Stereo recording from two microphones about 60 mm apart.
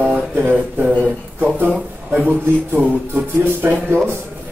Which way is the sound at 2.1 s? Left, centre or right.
Right.